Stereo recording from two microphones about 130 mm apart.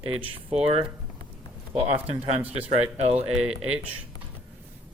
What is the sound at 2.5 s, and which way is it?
Speech, 50° right (ahead or behind).